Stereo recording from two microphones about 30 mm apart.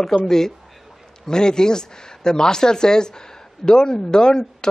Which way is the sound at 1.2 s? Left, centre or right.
Left.